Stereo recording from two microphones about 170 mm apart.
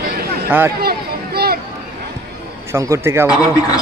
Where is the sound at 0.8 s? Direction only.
65° right (ahead or behind).